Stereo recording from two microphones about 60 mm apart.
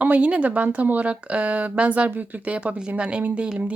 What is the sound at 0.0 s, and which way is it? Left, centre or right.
Speech, right.